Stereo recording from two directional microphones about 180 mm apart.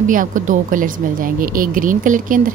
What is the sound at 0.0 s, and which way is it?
Speech, 45° right (ahead or behind).